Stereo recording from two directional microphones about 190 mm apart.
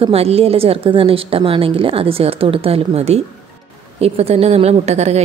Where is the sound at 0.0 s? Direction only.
30° right (ahead or behind).